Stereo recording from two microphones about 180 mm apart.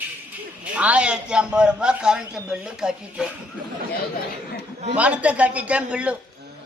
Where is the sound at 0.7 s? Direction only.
5° right (ahead or behind).